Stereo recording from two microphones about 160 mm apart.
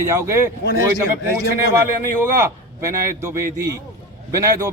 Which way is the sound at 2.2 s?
15° right (ahead or behind).